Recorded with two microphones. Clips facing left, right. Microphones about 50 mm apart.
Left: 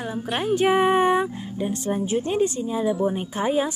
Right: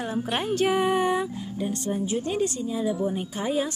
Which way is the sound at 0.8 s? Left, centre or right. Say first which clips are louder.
Left 4 dB; left.